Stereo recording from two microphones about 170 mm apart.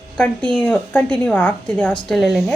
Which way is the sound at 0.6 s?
10° left (ahead or behind).